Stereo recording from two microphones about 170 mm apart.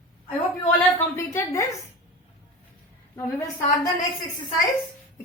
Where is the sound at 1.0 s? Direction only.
15° left (ahead or behind).